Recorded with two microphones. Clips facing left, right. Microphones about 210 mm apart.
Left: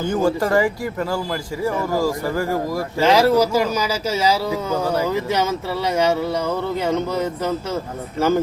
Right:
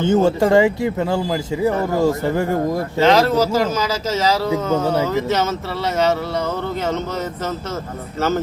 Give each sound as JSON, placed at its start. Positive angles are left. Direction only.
{"t": 0.0, "sound": "a man's voice", "side_deg": -25}
{"t": 3.0, "sound": "speech", "side_deg": 10}
{"t": 4.7, "sound": "a man's voice", "side_deg": -25}
{"t": 5.0, "sound": "speech", "side_deg": 10}
{"t": 6.8, "sound": "speech", "side_deg": 10}